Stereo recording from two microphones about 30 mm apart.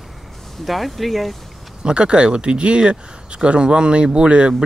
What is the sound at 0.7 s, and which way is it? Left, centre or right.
Speech, centre.